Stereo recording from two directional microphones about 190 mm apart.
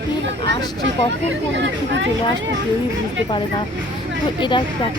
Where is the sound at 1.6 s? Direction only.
65° right (ahead or behind).